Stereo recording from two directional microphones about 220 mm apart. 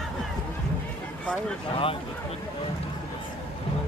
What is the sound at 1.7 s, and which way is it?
Speech, 25° left (ahead or behind).